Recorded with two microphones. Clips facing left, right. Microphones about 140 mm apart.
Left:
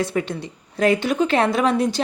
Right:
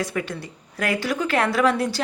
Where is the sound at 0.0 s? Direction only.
30° left (ahead or behind).